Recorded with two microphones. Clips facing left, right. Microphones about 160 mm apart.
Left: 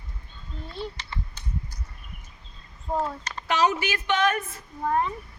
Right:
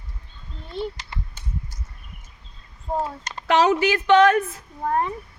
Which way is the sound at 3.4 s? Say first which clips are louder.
Right 6 dB; 60° right (ahead or behind).